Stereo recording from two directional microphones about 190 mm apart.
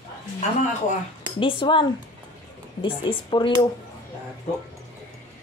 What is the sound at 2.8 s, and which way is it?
Speech, 25° left (ahead or behind).